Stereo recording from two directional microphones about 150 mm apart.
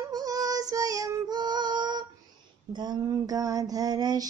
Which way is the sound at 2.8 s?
25° right (ahead or behind).